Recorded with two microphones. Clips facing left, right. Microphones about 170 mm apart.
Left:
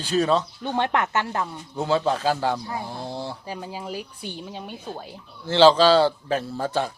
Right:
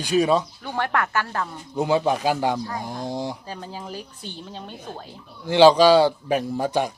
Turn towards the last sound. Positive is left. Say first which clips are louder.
# right 3 dB
turn(degrees=-15)  # may be behind; listen again after turning